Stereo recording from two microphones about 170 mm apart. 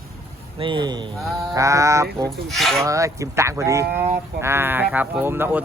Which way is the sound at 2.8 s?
20° right (ahead or behind).